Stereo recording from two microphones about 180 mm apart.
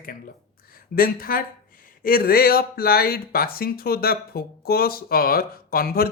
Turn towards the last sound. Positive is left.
turn(degrees=55)  # may be behind; listen again after turning